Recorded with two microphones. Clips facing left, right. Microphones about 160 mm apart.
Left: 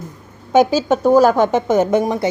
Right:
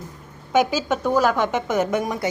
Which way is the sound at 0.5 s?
30° left (ahead or behind).